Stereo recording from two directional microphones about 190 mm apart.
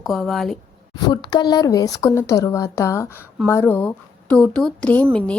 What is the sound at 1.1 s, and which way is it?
Speech, 25° left (ahead or behind).